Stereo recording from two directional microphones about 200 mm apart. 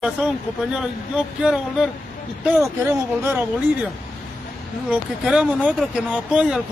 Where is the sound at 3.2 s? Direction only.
10° right (ahead or behind).